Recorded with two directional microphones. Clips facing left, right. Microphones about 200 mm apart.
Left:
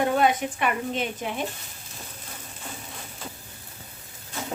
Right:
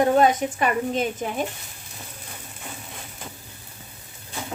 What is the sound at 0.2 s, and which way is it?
Speech, 40° right (ahead or behind).